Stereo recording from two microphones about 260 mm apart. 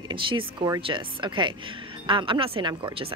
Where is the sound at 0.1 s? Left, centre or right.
Centre.